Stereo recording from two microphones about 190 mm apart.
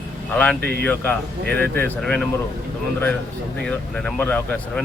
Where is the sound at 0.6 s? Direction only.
60° right (ahead or behind).